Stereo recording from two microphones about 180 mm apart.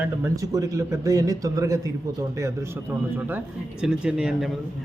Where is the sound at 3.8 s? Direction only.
5° right (ahead or behind).